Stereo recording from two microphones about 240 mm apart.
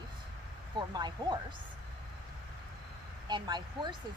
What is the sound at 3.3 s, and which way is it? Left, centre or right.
Speech, centre.